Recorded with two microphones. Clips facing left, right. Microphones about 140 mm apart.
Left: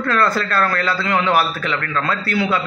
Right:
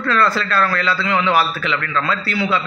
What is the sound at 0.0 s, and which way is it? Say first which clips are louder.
A man's voice: even; 50° left (ahead or behind).